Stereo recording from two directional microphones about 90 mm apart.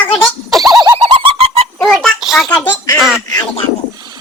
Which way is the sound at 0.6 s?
45° right (ahead or behind).